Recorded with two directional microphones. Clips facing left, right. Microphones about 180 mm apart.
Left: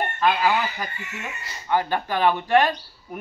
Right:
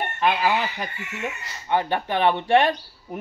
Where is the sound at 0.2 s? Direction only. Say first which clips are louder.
Even; 20° right (ahead or behind).